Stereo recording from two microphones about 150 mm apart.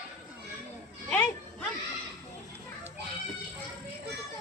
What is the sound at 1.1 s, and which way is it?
Music, 10° left (ahead or behind).